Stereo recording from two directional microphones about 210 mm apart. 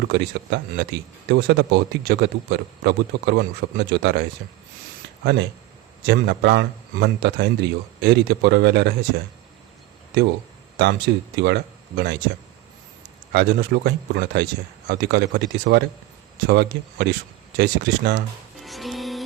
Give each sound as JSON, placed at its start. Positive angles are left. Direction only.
{"t": 0.1, "sound": "speech", "side_deg": -55}
{"t": 10.8, "sound": "speech", "side_deg": -55}
{"t": 13.3, "sound": "speech", "side_deg": -50}
{"t": 18.6, "sound": "music", "side_deg": 0}